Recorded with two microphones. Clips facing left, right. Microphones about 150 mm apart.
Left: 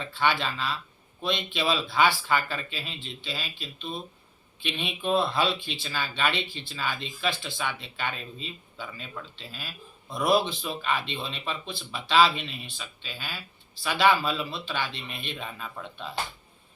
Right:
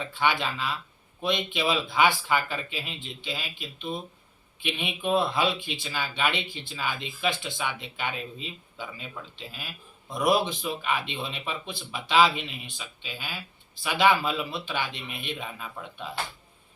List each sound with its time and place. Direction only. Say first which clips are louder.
0.0 s speech: even; 15° right (ahead or behind)